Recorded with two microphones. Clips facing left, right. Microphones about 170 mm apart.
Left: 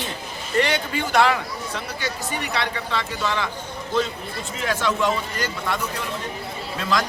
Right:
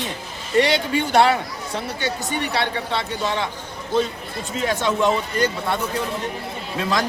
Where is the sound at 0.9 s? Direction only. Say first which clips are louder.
Right 2 dB; 25° right (ahead or behind).